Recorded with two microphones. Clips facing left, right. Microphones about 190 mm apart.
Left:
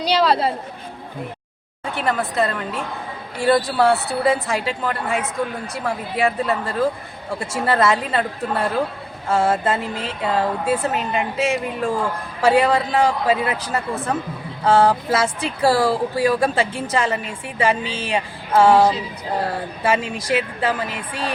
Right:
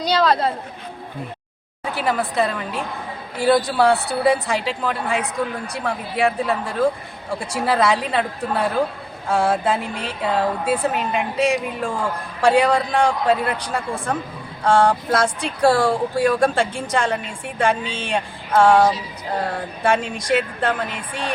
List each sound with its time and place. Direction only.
0.3 s speech: 5° left (ahead or behind)
2.0 s speech: centre (ahead or behind)